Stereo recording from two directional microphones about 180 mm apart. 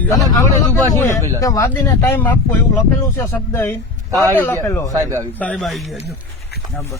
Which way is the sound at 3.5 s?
15° left (ahead or behind).